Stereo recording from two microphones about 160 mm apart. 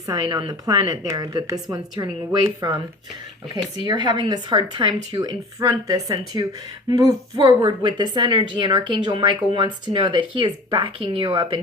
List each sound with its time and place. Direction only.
0.1 s a woman's voice: 25° right (ahead or behind)